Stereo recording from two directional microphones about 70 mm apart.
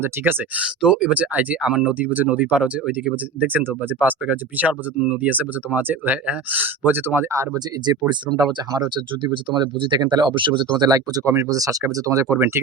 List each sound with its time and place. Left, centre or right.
0.0 s speech: right
0.6 s speech: centre
3.4 s speech: right
7.9 s speech: right
9.0 s speech: right